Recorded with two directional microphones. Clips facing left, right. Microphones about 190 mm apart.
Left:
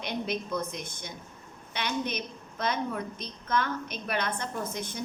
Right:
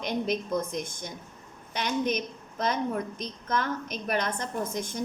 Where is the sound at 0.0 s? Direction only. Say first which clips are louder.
Right 3 dB; 45° right (ahead or behind).